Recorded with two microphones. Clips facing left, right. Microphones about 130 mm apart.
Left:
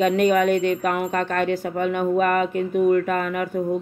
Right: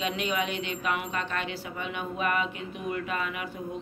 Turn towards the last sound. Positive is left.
turn(degrees=50)  # may be behind; listen again after turning